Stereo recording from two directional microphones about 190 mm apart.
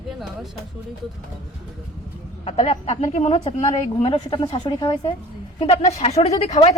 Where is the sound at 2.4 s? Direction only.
30° left (ahead or behind).